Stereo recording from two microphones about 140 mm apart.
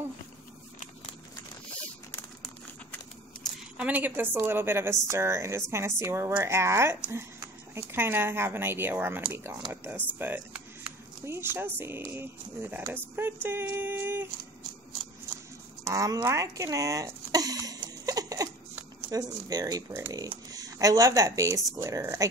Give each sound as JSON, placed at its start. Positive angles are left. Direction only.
{"t": 3.7, "sound": "a woman's voice", "side_deg": -10}
{"t": 15.8, "sound": "a sound", "side_deg": -25}
{"t": 19.0, "sound": "a woman's voice", "side_deg": -25}